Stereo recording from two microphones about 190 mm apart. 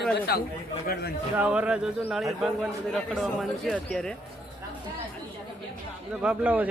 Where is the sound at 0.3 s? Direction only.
55° left (ahead or behind).